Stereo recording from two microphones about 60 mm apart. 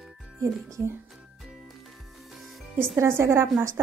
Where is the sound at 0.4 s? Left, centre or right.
Right.